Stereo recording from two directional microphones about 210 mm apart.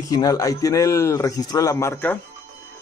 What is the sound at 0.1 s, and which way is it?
Speech, 15° left (ahead or behind).